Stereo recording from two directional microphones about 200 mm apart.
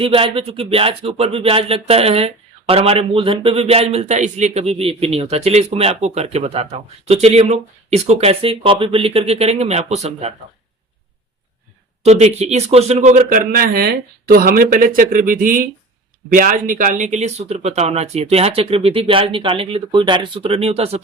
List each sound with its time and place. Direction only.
0.0 s speech: 25° right (ahead or behind)
12.0 s speech: 35° right (ahead or behind)